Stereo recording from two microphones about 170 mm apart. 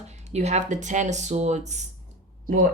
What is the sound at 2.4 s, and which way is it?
Speech, 55° right (ahead or behind).